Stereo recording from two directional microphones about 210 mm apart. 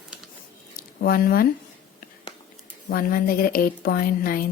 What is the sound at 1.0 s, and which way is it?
Speech, 45° left (ahead or behind).